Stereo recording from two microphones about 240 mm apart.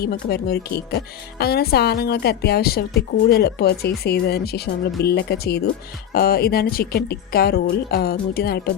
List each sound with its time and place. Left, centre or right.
0.0 s speech: left